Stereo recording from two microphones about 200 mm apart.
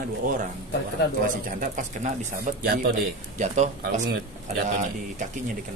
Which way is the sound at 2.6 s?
50° right (ahead or behind).